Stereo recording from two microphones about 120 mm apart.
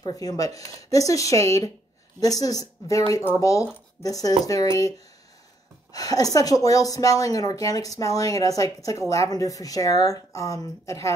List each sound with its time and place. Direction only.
0.0 s a woman's voice: 30° left (ahead or behind)